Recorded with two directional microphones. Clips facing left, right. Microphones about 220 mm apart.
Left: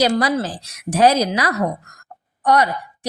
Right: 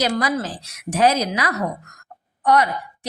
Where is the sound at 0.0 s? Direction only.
30° left (ahead or behind).